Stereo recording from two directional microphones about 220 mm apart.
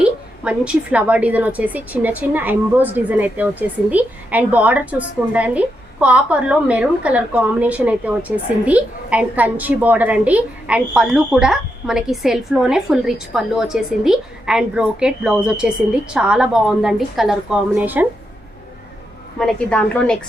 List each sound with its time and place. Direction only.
0.0 s a woman's voice: 5° right (ahead or behind)
19.4 s a woman's voice: 5° left (ahead or behind)